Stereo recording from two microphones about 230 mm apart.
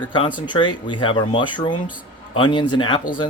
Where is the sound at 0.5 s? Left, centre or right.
Left.